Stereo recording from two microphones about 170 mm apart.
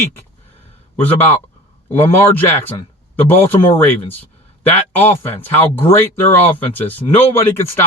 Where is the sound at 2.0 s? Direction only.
10° left (ahead or behind).